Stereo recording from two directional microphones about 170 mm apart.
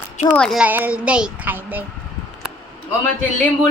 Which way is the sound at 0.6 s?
10° right (ahead or behind).